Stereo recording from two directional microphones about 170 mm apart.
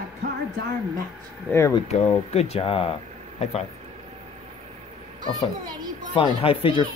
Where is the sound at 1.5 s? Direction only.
15° left (ahead or behind).